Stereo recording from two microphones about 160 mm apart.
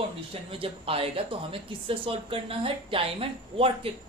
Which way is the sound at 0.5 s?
35° right (ahead or behind).